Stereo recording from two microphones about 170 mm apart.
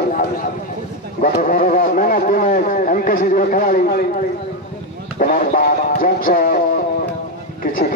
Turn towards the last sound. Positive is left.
turn(degrees=55)  # may be behind; listen again after turning